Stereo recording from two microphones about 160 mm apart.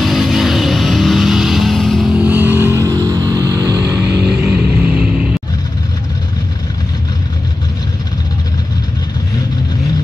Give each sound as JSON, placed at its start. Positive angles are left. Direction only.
{"t": 0.0, "sound": "music", "side_deg": 0}
{"t": 4.0, "sound": "music", "side_deg": -10}